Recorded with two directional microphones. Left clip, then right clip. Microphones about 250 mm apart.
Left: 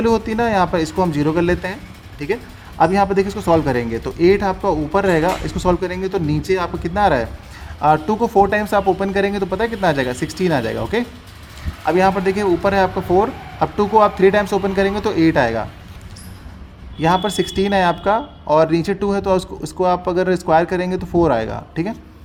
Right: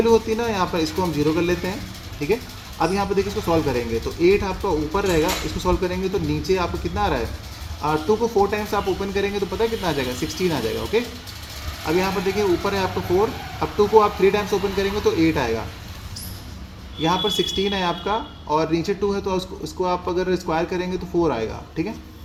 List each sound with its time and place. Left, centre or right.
0.0 s speech: left
2.7 s speech: left
17.0 s speech: left